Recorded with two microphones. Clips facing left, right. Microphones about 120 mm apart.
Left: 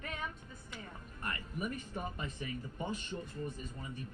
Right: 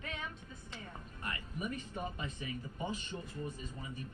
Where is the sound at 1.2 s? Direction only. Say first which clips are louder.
Left 2 dB; 45° left (ahead or behind).